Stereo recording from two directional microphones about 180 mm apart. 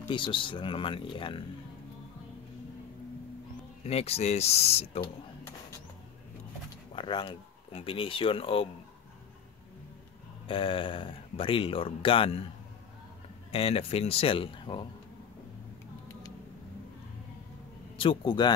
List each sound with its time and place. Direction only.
0.1 s speech: 30° left (ahead or behind)
3.8 s speech: 35° left (ahead or behind)
7.0 s speech: 25° left (ahead or behind)
10.4 s speech: 30° left (ahead or behind)
13.5 s speech: 30° left (ahead or behind)
17.9 s speech: 30° left (ahead or behind)